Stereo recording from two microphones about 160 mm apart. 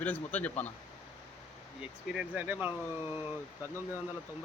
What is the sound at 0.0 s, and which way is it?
Speech, 10° left (ahead or behind).